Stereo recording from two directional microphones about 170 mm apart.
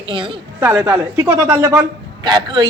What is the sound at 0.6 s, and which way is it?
A woman's voice, 10° right (ahead or behind).